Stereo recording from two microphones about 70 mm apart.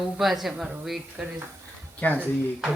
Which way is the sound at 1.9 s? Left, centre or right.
Left.